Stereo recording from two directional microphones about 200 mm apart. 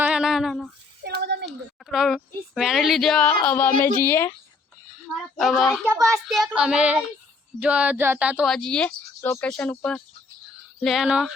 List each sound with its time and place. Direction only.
0.0 s a sound: 5° right (ahead or behind)
1.0 s a sound: 55° right (ahead or behind)
1.5 s a woman's voice: centre (ahead or behind)
5.4 s speech: centre (ahead or behind)
5.8 s a child's voice: 15° right (ahead or behind)
6.1 s speech: centre (ahead or behind)